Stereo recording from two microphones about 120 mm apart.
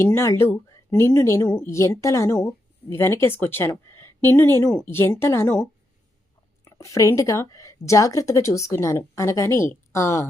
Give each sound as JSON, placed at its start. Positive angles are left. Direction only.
{"t": 0.0, "sound": "a woman's voice", "side_deg": 20}
{"t": 6.7, "sound": "speech", "side_deg": 25}